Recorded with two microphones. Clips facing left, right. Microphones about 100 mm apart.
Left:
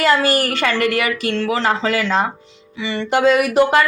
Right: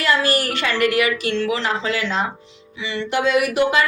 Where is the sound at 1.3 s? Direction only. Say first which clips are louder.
Left 3 dB; 40° left (ahead or behind).